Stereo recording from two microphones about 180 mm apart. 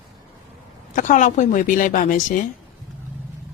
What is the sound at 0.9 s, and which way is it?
A woman's voice, 45° left (ahead or behind).